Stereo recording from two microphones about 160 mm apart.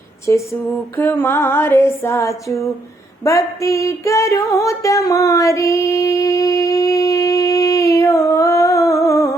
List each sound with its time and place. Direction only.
0.9 s female singing: 10° left (ahead or behind)
3.2 s music: 20° left (ahead or behind)